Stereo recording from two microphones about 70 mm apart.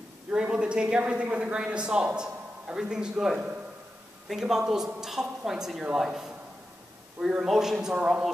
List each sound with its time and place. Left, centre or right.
0.3 s a woman's voice: centre